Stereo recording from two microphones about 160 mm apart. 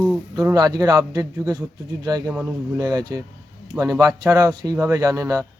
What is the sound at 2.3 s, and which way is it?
Speech, 10° right (ahead or behind).